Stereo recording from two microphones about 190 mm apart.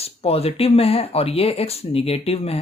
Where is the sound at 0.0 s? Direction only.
30° left (ahead or behind).